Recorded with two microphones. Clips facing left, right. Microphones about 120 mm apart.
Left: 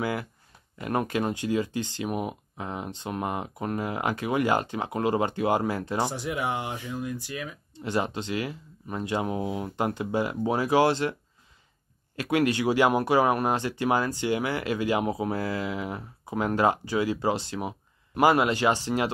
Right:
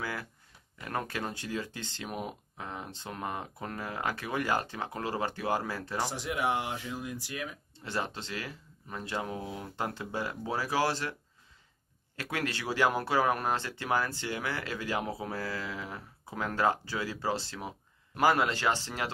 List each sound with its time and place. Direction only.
0.0 s speech: 20° left (ahead or behind)
6.1 s speech: centre (ahead or behind)
7.7 s speech: 15° left (ahead or behind)
12.2 s speech: 15° left (ahead or behind)